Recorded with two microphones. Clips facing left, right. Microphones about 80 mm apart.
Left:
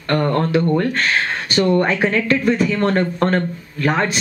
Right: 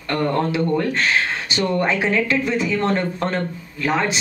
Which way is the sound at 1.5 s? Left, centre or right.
Left.